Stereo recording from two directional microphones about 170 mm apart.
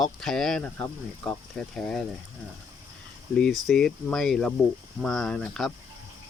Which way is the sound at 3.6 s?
Centre (ahead or behind).